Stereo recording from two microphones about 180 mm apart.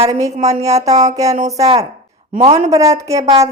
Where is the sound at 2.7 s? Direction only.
15° right (ahead or behind).